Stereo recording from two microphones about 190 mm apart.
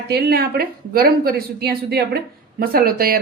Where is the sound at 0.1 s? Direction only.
55° right (ahead or behind).